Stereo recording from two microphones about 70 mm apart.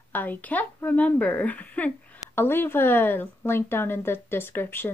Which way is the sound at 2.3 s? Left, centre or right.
Left.